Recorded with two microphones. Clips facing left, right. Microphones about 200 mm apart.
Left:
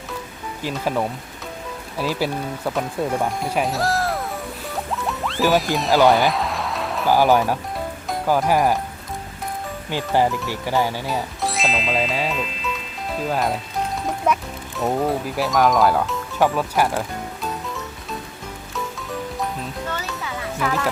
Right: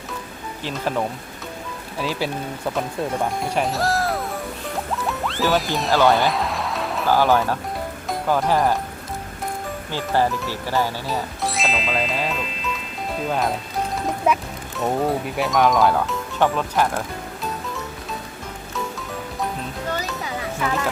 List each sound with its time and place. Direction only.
0.6 s speech: 5° left (ahead or behind)
3.4 s speech: centre (ahead or behind)
5.0 s music: centre (ahead or behind)
7.1 s speech: 15° left (ahead or behind)
9.9 s speech: 15° left (ahead or behind)
11.4 s music: centre (ahead or behind)
13.2 s speech: centre (ahead or behind)
14.8 s speech: centre (ahead or behind)
20.6 s speech: centre (ahead or behind)